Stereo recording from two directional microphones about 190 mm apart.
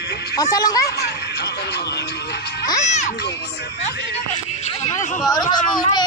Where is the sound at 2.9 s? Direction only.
40° left (ahead or behind).